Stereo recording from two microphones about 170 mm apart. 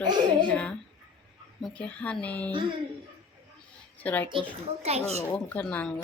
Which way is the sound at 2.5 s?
30° right (ahead or behind).